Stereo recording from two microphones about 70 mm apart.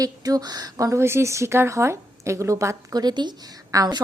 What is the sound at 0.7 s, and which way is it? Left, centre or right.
Speech, right.